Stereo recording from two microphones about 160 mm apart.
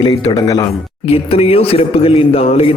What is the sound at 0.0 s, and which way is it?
Speech, 25° left (ahead or behind).